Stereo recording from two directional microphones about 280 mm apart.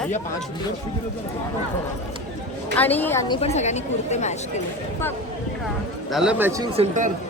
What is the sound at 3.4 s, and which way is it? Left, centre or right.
Speech, left.